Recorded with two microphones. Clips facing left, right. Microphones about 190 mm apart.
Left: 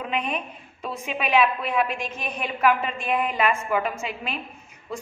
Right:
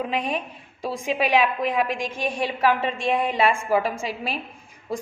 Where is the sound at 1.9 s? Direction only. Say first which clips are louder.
Right 3 dB; 90° right.